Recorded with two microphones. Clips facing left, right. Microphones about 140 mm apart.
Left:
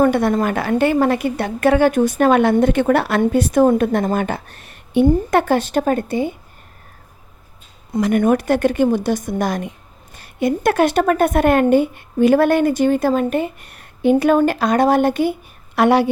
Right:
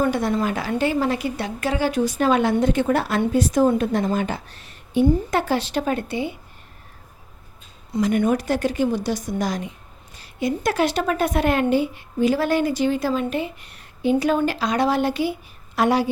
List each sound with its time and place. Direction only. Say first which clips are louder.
0.0 s a woman's voice: left 6 dB; 60° left (ahead or behind)
7.9 s a woman's voice: left 4 dB; 50° left (ahead or behind)